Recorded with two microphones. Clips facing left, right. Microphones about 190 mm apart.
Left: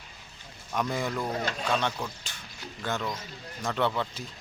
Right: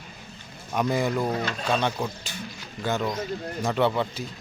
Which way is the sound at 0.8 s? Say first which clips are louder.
Right 6 dB; 5° right (ahead or behind).